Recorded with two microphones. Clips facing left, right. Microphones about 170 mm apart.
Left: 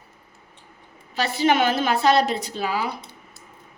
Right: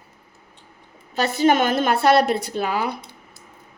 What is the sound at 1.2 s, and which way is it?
Speech, 45° right (ahead or behind).